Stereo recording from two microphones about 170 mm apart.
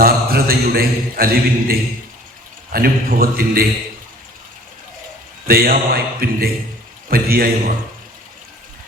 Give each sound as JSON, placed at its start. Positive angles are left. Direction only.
{"t": 0.0, "sound": "a man's voice", "side_deg": -60}
{"t": 5.5, "sound": "a man's voice", "side_deg": -60}